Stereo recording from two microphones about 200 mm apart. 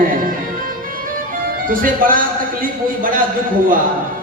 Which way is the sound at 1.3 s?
45° right (ahead or behind).